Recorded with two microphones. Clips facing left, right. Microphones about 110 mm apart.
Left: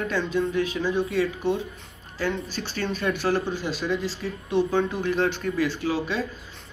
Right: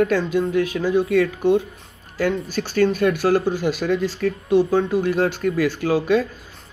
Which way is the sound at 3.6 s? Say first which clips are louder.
Right 6 dB; 60° right (ahead or behind).